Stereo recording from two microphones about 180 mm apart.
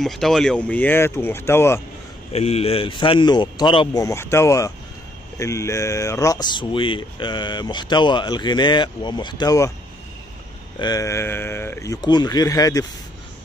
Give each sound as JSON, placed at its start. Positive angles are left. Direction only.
{"t": 0.0, "sound": "speech", "side_deg": 0}
{"t": 2.3, "sound": "speech", "side_deg": 35}
{"t": 10.8, "sound": "speech", "side_deg": 20}